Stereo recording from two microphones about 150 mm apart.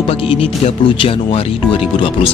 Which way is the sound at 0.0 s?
40° left (ahead or behind).